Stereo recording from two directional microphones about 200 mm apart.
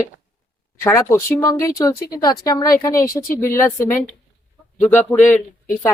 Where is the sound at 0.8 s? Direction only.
15° left (ahead or behind).